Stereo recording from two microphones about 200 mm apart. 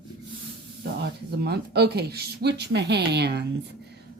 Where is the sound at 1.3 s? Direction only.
55° right (ahead or behind).